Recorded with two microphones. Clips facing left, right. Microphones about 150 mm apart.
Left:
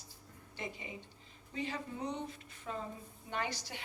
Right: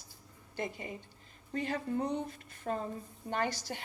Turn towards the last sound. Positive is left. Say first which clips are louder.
# right 5 dB
turn(degrees=-45)  # may be behind; listen again after turning